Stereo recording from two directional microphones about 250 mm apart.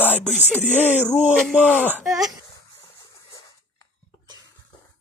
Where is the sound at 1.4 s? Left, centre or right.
Centre.